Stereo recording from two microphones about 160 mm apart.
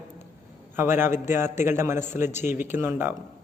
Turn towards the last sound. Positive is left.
turn(degrees=-15)  # may be behind; listen again after turning